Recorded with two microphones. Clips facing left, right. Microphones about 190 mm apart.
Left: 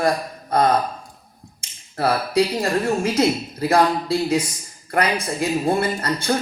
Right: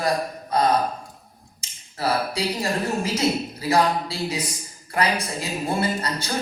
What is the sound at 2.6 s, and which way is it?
Speech, 55° left (ahead or behind).